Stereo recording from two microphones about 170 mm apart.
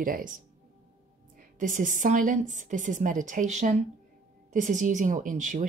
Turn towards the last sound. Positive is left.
turn(degrees=-50)  # may be behind; listen again after turning